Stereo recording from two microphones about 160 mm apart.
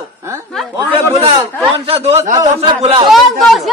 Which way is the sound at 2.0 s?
40° right (ahead or behind).